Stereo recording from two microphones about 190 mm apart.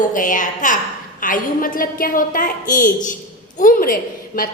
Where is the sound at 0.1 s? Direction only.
45° left (ahead or behind).